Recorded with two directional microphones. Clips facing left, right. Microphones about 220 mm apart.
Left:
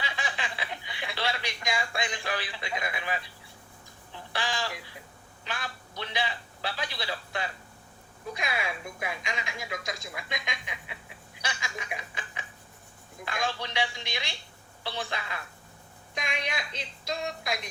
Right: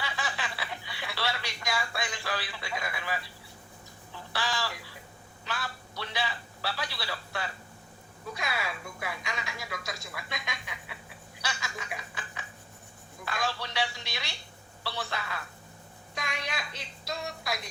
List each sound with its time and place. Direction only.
0.0 s a sound: 20° left (ahead or behind)
5.5 s a man's voice: 20° left (ahead or behind)
11.4 s snicker: 15° left (ahead or behind)
13.2 s speech: 20° left (ahead or behind)